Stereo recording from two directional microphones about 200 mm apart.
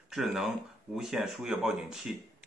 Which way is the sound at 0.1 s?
Centre (ahead or behind).